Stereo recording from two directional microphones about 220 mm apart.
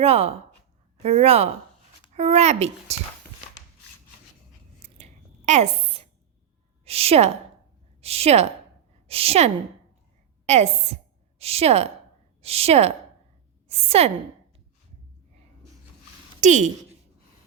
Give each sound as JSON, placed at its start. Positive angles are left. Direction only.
{"t": 0.0, "sound": "speech", "side_deg": -30}
{"t": 4.8, "sound": "biting", "side_deg": -30}
{"t": 5.5, "sound": "a sound", "side_deg": -30}
{"t": 6.8, "sound": "a woman's voice", "side_deg": -25}
{"t": 16.4, "sound": "a woman's voice", "side_deg": -35}